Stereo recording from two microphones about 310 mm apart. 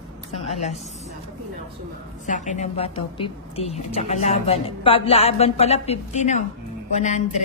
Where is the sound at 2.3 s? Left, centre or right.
Left.